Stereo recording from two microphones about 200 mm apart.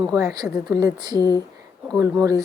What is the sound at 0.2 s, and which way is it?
A woman's voice, 15° right (ahead or behind).